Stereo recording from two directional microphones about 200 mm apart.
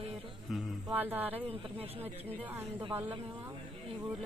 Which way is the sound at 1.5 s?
30° right (ahead or behind).